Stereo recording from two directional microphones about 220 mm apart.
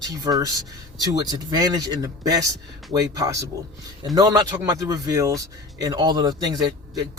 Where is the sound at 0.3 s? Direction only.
15° right (ahead or behind).